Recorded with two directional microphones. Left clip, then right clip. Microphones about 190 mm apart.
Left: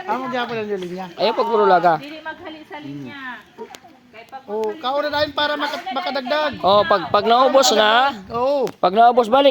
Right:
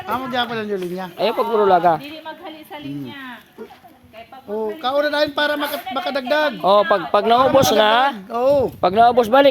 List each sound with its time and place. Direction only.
0.1 s speech: 60° right (ahead or behind)
1.2 s speech: centre (ahead or behind)
4.4 s a man's voice: 50° right (ahead or behind)
6.6 s speech: centre (ahead or behind)
8.3 s a man's voice: 50° right (ahead or behind)
8.8 s speech: centre (ahead or behind)